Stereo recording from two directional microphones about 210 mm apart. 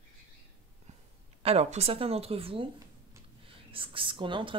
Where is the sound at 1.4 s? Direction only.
30° right (ahead or behind).